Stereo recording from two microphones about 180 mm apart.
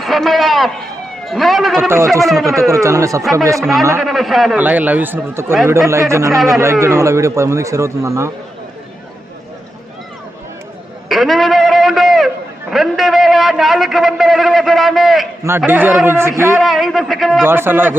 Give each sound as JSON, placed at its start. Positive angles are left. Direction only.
{"t": 0.0, "sound": "a man's voice", "side_deg": 0}
{"t": 2.6, "sound": "a man's voice", "side_deg": -15}
{"t": 3.6, "sound": "a man's voice", "side_deg": 0}
{"t": 6.3, "sound": "a man's voice", "side_deg": 0}
{"t": 6.6, "sound": "a man's voice", "side_deg": -15}
{"t": 11.1, "sound": "a sound", "side_deg": 0}
{"t": 15.4, "sound": "a man's voice", "side_deg": -10}
{"t": 16.6, "sound": "a man's voice", "side_deg": 0}
{"t": 17.4, "sound": "a man's voice", "side_deg": -10}